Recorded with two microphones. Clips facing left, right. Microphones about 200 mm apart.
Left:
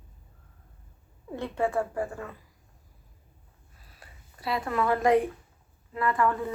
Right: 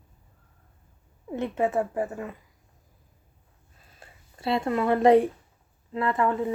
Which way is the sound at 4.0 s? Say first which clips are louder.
Right 5 dB; 25° right (ahead or behind).